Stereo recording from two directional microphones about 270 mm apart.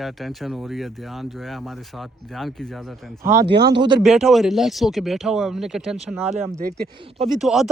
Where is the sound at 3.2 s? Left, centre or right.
Centre.